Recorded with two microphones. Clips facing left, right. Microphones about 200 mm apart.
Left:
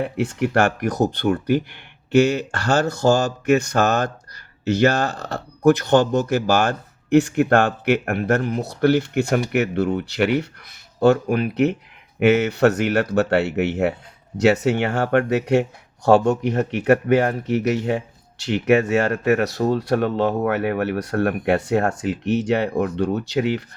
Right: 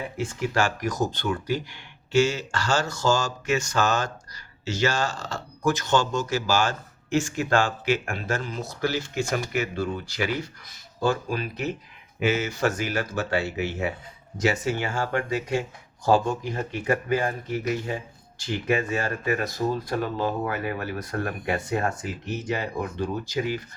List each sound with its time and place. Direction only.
0.0 s speech: 65° left (ahead or behind)